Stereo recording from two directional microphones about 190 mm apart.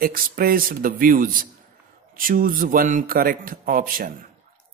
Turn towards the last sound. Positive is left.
turn(degrees=-45)  # may be behind; listen again after turning